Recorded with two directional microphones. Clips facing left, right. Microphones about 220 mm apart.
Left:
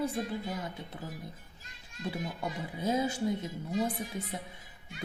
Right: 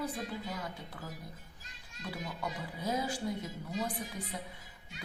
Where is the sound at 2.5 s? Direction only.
25° left (ahead or behind).